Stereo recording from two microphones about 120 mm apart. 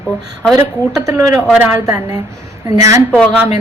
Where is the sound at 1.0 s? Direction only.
25° right (ahead or behind).